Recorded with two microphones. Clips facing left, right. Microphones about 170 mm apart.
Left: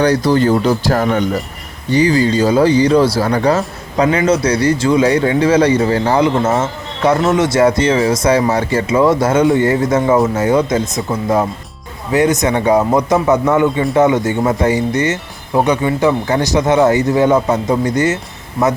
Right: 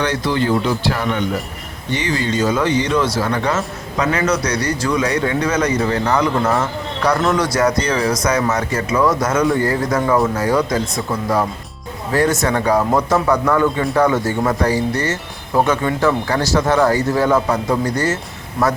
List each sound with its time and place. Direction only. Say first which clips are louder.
0.0 s speech: left 6 dB; 40° left (ahead or behind); by 18.2 s 20° left (ahead or behind)
18.6 s speech: left 3 dB; centre (ahead or behind)